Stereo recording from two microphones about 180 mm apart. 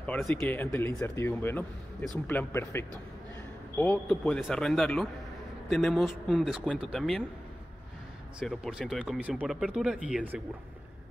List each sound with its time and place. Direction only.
0.0 s speech: 5° left (ahead or behind)
8.4 s speech: centre (ahead or behind)